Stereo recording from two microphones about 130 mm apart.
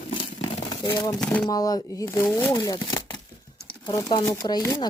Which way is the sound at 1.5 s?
30° left (ahead or behind).